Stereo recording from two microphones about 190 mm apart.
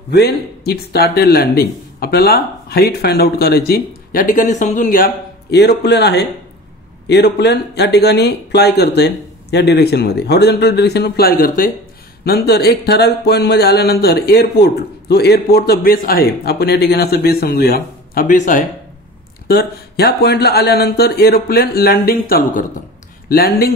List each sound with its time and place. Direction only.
0.1 s speech: 55° left (ahead or behind); by 18.7 s 40° left (ahead or behind)
19.4 s speech: 55° left (ahead or behind)